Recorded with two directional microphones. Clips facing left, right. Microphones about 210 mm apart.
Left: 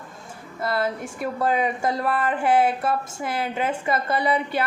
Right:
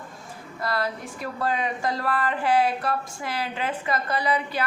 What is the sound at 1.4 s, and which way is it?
Speech, 20° left (ahead or behind).